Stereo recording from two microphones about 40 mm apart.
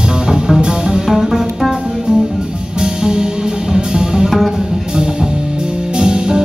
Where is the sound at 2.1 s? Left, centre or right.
Right.